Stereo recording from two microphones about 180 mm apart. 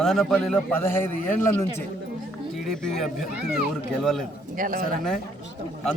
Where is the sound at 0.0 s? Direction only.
Centre (ahead or behind).